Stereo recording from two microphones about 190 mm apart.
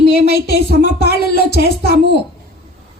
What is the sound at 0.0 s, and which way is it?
Music, 60° left (ahead or behind).